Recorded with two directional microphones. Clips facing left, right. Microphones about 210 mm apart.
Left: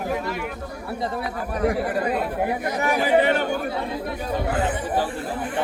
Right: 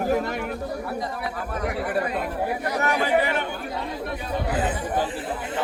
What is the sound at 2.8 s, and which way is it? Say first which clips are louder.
Speech: left 3 dB; 15° left (ahead or behind).